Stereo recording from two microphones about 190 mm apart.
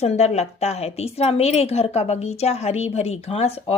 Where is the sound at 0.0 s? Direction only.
35° left (ahead or behind).